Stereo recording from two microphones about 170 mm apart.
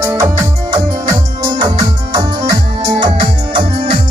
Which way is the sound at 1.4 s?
25° right (ahead or behind).